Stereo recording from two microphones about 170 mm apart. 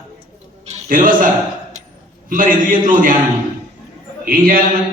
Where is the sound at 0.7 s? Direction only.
55° right (ahead or behind).